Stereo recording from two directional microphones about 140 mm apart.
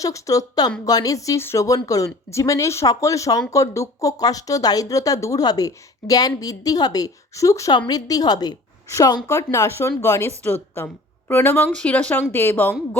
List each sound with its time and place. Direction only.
0.0 s speech: 25° left (ahead or behind)